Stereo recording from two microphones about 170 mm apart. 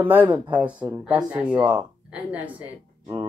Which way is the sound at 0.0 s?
10° right (ahead or behind).